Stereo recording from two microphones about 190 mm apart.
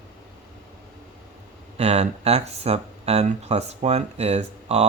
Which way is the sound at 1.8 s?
35° right (ahead or behind).